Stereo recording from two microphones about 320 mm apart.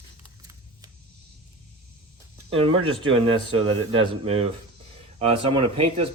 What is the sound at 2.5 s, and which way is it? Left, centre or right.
Speech, centre.